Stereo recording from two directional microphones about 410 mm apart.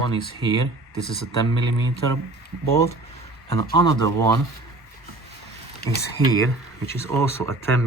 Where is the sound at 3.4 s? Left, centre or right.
Centre.